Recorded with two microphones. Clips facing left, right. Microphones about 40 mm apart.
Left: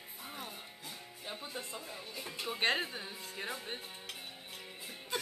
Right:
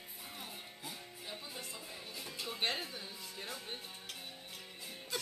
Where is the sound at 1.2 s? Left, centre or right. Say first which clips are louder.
Left 4 dB; left.